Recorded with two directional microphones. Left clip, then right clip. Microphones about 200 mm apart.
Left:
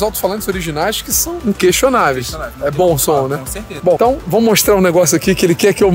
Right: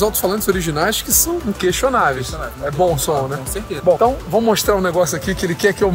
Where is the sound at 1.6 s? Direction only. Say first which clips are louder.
Left 5 dB; 55° left (ahead or behind).